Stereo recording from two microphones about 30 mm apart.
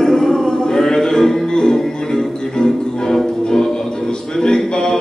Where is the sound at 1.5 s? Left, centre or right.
Left.